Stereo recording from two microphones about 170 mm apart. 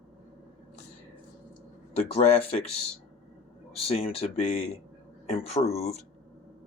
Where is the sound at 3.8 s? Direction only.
35° left (ahead or behind).